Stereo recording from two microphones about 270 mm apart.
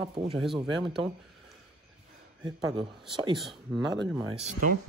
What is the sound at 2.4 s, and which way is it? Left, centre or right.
Speech, centre.